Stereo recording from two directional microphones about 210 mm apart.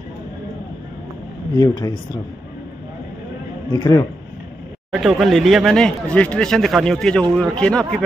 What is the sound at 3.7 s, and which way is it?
Speech, 20° left (ahead or behind).